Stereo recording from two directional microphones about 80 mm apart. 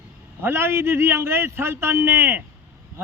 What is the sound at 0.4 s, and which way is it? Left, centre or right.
A man's voice, right.